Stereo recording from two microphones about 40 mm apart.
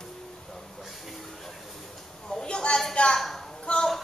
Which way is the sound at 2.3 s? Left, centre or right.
Left.